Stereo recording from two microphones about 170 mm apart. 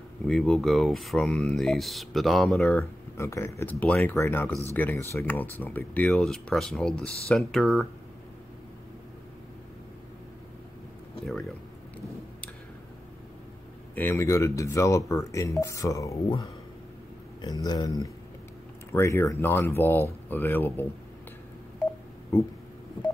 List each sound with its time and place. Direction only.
0.3 s speech: 5° left (ahead or behind)
3.2 s speech: 15° left (ahead or behind)
13.9 s speech: 15° left (ahead or behind)
17.4 s speech: 25° left (ahead or behind)